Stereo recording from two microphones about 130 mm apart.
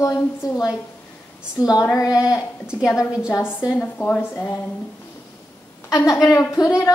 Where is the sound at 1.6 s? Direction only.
25° left (ahead or behind).